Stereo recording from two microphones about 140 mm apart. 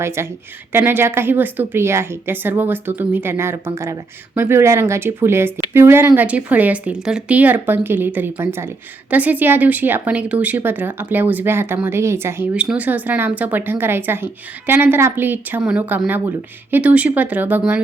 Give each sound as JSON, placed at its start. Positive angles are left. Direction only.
{"t": 0.0, "sound": "speech", "side_deg": -20}